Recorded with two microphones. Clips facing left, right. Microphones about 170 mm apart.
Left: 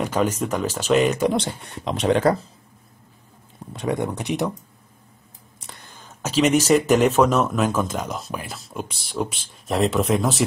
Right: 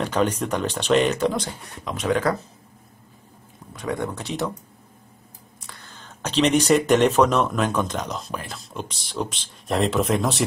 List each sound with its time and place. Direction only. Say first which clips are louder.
0.0 s speech: even; 5° left (ahead or behind)
1.3 s speech: left 4 dB; 25° left (ahead or behind)
3.7 s speech: left 3 dB; 20° left (ahead or behind)
5.7 s speech: left 1 dB; 15° left (ahead or behind); by 10.4 s centre (ahead or behind)